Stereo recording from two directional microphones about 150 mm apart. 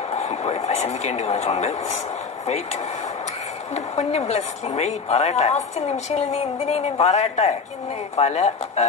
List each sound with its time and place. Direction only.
0.2 s a woman's voice: 50° left (ahead or behind)